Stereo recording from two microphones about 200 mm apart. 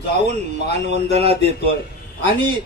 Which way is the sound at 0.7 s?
55° left (ahead or behind).